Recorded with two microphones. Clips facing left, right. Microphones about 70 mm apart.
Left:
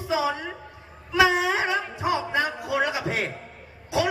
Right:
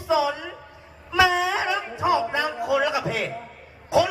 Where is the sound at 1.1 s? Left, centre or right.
Left.